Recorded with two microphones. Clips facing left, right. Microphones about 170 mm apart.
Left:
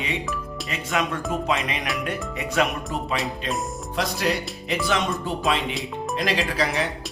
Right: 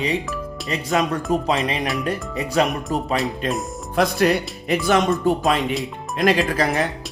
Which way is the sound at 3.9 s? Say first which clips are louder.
Right 7 dB; 55° right (ahead or behind).